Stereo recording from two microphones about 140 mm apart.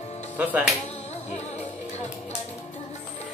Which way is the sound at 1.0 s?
50° left (ahead or behind).